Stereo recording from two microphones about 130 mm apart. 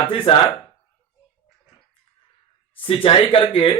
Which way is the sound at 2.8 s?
45° left (ahead or behind).